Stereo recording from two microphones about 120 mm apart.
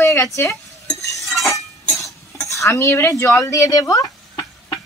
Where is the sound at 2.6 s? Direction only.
25° left (ahead or behind).